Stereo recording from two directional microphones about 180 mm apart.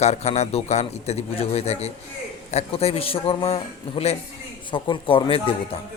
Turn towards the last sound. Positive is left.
turn(degrees=30)  # may be behind; listen again after turning